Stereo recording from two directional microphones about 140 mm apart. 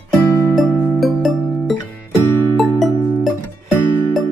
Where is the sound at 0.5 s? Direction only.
Centre (ahead or behind).